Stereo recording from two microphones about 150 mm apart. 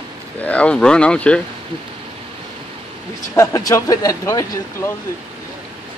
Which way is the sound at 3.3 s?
20° left (ahead or behind).